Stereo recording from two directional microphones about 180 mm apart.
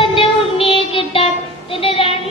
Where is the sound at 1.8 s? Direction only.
30° left (ahead or behind).